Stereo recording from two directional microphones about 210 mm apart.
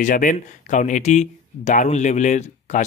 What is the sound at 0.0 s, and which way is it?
Speech, 40° left (ahead or behind).